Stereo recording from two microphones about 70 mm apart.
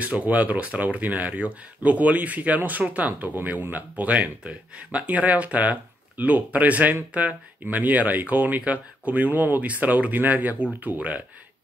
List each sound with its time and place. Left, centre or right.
0.0 s speech: centre